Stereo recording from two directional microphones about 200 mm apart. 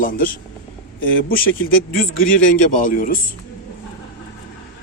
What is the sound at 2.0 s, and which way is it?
Speech, 45° left (ahead or behind).